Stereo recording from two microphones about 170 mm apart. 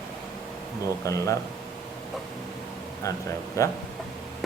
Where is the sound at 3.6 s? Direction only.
20° left (ahead or behind).